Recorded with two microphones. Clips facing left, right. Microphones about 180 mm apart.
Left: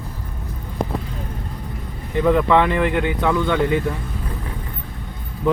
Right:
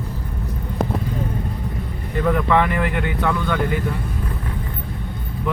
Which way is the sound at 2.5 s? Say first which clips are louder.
Left 2 dB; 20° left (ahead or behind).